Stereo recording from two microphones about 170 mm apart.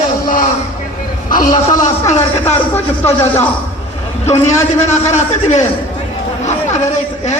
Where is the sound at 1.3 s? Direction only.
50° left (ahead or behind).